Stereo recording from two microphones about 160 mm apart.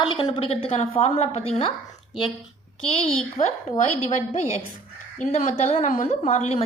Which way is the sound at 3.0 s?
40° left (ahead or behind).